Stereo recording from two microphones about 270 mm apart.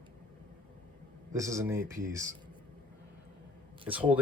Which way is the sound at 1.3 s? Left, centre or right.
Centre.